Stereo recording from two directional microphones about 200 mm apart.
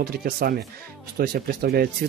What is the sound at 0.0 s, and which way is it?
Speech, 50° right (ahead or behind).